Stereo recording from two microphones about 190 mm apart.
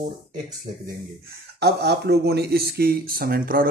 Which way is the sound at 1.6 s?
60° right (ahead or behind).